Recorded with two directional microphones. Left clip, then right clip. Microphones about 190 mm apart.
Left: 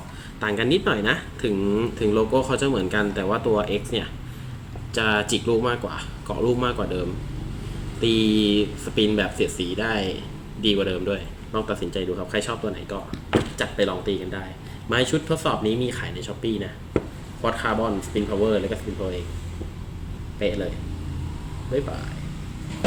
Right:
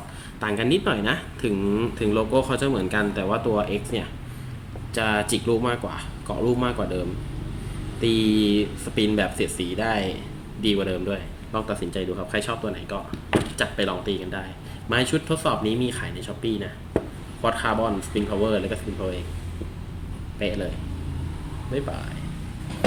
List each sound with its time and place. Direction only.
0.3 s speech: 20° right (ahead or behind)
4.9 s speech: 20° right (ahead or behind)
8.0 s speech: 15° right (ahead or behind)